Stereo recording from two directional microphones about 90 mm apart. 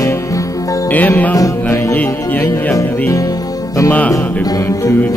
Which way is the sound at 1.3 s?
40° left (ahead or behind).